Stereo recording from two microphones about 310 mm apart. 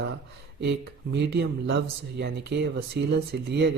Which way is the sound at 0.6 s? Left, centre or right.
Right.